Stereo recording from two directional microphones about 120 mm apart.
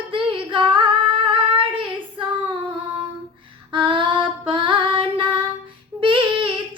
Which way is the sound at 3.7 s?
45° right (ahead or behind).